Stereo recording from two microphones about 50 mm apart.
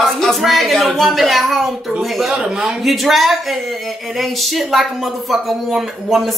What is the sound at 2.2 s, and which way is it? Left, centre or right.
Speech, centre.